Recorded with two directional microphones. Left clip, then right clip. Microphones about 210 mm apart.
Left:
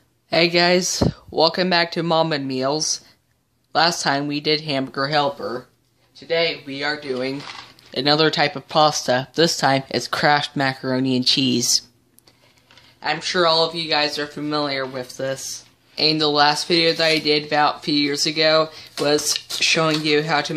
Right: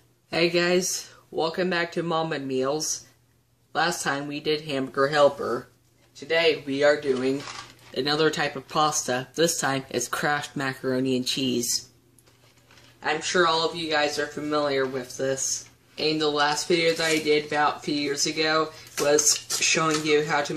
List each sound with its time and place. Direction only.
0.3 s speech: 25° left (ahead or behind)
13.0 s speech: 35° left (ahead or behind)